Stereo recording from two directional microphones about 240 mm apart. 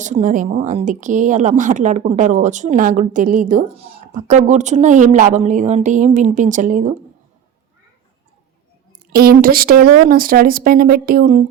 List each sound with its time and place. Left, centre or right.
0.0 s speech: right
9.1 s speech: right